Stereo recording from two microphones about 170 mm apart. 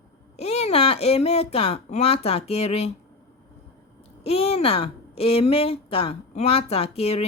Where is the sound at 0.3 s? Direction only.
35° left (ahead or behind).